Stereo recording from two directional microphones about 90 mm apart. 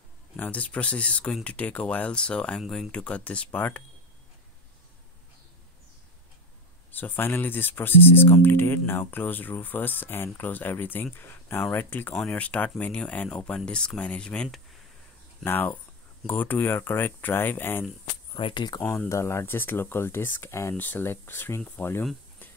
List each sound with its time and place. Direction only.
0.4 s speech: 15° left (ahead or behind)
2.6 s speech: centre (ahead or behind)
2.9 s speech: 15° left (ahead or behind)
6.9 s speech: 20° left (ahead or behind)
15.4 s speech: 20° left (ahead or behind)
18.4 s speech: 55° left (ahead or behind)
18.8 s speech: 20° left (ahead or behind)
19.0 s speech: 30° left (ahead or behind)
20.7 s speech: 20° left (ahead or behind)